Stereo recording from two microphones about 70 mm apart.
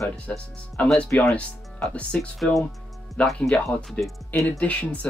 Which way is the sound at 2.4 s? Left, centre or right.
Centre.